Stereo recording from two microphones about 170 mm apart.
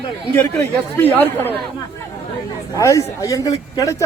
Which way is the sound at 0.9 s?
10° left (ahead or behind).